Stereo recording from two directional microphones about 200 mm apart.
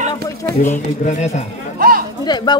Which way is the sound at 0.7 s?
35° left (ahead or behind).